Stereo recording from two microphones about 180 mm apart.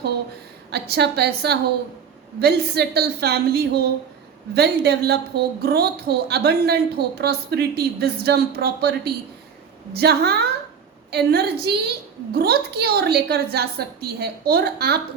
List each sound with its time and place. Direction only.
0.7 s a woman's voice: 65° right (ahead or behind)